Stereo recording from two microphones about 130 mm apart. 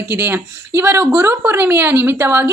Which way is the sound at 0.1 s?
15° right (ahead or behind).